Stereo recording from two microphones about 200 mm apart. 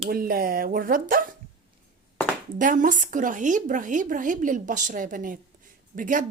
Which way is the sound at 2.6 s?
40° right (ahead or behind).